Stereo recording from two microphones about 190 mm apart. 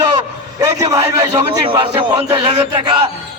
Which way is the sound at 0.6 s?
20° right (ahead or behind).